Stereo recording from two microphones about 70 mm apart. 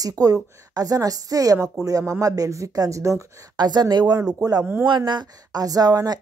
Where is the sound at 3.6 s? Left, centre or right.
Right.